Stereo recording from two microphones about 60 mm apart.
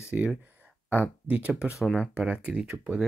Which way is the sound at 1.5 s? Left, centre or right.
Centre.